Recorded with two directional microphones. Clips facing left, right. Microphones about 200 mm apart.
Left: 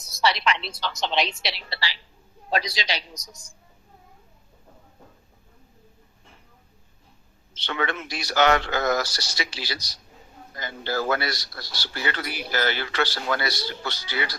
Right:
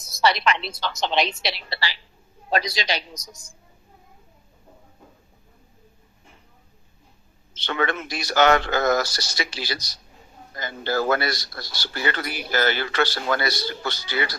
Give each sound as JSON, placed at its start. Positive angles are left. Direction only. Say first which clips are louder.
{"t": 0.2, "sound": "speech", "louder": "right 3 dB", "side_deg": -50}
{"t": 7.5, "sound": "speech", "louder": "right 3 dB", "side_deg": -50}